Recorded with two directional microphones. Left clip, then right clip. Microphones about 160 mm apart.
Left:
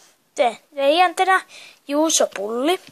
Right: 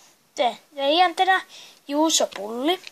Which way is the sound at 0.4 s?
30° left (ahead or behind).